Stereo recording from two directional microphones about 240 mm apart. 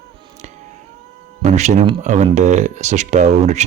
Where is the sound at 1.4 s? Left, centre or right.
Right.